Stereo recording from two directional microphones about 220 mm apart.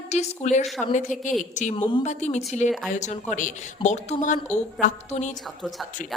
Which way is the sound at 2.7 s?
Centre (ahead or behind).